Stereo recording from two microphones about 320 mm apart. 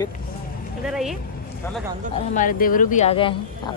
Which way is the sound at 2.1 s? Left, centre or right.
Left.